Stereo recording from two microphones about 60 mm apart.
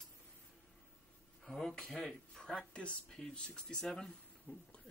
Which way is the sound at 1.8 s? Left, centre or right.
Centre.